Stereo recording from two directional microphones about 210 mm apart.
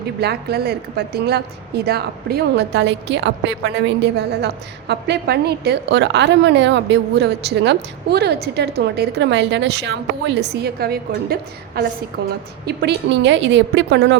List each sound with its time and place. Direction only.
0.2 s a woman's voice: 50° right (ahead or behind)